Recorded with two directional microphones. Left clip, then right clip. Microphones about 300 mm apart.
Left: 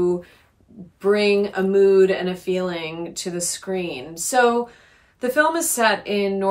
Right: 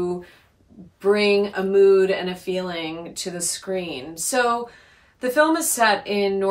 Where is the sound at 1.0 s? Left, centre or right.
Centre.